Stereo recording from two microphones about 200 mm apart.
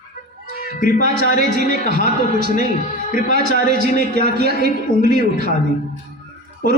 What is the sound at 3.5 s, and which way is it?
A man's voice, 55° right (ahead or behind).